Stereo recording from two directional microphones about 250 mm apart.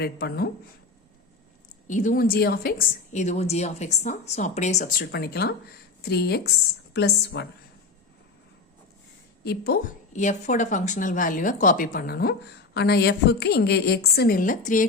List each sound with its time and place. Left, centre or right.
0.0 s a woman's voice: left
1.9 s a woman's voice: left
9.4 s a woman's voice: left